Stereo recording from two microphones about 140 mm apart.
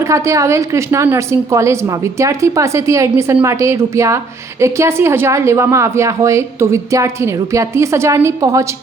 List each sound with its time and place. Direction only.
0.0 s a woman's voice: 20° right (ahead or behind)